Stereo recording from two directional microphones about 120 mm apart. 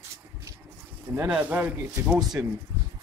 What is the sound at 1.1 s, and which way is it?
Speech, 15° right (ahead or behind).